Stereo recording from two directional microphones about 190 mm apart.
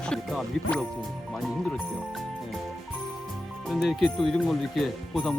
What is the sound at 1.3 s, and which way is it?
Speech, centre (ahead or behind).